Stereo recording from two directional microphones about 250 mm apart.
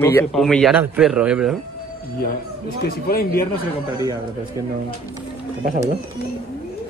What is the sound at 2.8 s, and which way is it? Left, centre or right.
Speech, left.